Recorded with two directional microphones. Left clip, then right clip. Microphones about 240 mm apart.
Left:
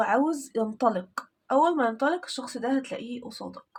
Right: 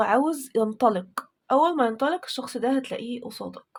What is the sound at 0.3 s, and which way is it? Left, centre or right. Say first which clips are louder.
Speech: right 4 dB; right.